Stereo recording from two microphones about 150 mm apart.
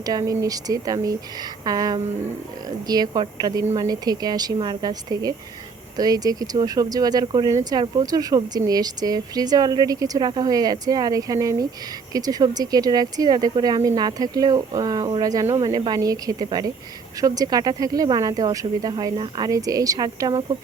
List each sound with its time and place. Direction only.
0.0 s speech: 25° right (ahead or behind)